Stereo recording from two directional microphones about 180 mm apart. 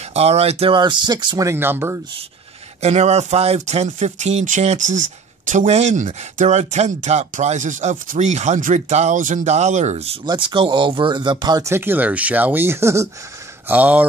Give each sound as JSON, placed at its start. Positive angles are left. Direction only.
{"t": 0.1, "sound": "speech", "side_deg": -35}
{"t": 2.8, "sound": "speech", "side_deg": -35}
{"t": 10.2, "sound": "speech", "side_deg": -25}